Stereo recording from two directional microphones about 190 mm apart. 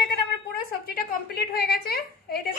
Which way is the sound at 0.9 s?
55° left (ahead or behind).